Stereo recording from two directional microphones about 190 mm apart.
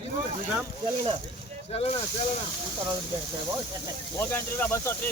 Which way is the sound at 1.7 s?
30° left (ahead or behind).